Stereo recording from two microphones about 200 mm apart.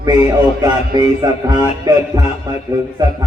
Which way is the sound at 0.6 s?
20° right (ahead or behind).